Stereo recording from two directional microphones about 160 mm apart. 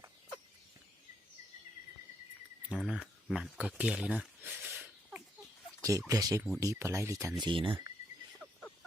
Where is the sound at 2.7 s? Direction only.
Centre (ahead or behind).